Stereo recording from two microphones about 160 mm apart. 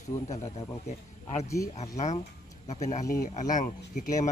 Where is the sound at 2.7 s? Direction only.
45° left (ahead or behind).